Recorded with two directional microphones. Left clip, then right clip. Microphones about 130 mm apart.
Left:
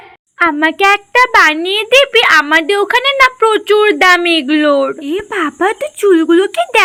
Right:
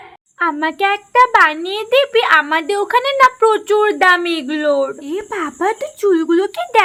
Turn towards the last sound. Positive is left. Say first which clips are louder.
# left 4 dB
turn(degrees=20)  # may be behind; listen again after turning